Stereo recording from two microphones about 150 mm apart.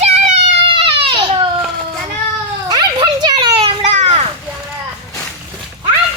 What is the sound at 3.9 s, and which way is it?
Children playing, 45° right (ahead or behind).